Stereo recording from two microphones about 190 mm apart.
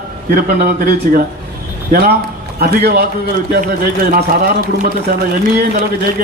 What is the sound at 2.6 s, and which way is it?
Speech, 55° right (ahead or behind).